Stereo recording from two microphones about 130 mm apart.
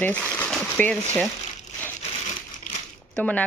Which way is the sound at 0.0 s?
15° left (ahead or behind).